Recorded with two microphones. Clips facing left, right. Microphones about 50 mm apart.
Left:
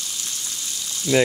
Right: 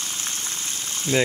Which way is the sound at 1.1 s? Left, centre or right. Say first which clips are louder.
Left 3 dB; right.